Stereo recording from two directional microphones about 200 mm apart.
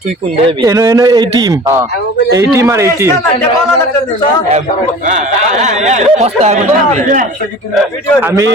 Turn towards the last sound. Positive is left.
turn(degrees=-40)  # may be behind; listen again after turning